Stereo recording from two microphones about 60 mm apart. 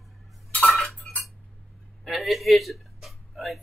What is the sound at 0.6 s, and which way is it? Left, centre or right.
Cutlery, centre.